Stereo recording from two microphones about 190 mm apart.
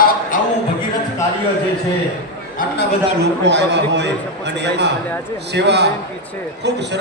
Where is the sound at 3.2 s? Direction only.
65° right (ahead or behind).